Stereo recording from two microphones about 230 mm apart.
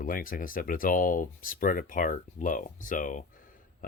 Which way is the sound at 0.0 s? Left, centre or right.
Left.